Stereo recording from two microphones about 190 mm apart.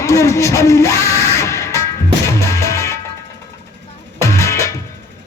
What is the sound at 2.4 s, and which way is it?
Music, 15° left (ahead or behind).